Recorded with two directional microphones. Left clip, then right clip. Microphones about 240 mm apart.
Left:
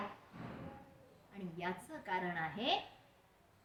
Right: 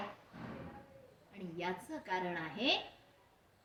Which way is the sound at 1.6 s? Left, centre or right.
Centre.